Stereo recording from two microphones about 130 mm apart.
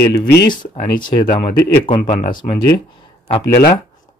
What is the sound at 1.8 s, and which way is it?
Speech, 35° left (ahead or behind).